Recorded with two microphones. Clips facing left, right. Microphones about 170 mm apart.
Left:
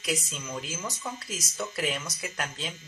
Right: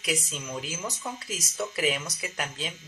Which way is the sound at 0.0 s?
Centre (ahead or behind).